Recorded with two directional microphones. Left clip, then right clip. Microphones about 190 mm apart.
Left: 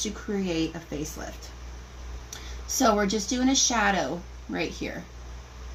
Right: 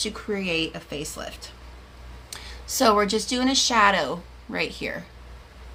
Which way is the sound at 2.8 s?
15° right (ahead or behind).